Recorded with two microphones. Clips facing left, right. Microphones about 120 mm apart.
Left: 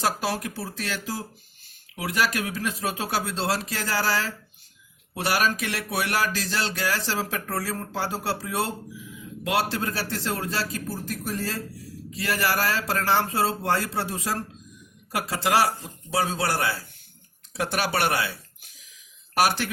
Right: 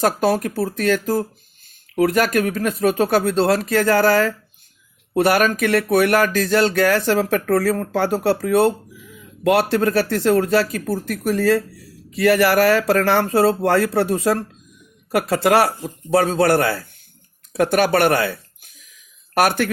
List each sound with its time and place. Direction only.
0.0 s speech: 50° right (ahead or behind)